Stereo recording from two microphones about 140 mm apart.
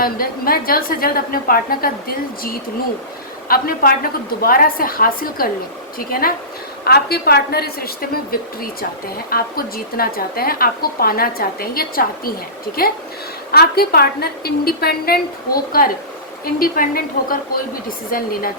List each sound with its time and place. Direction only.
0.0 s a woman's voice: 90° left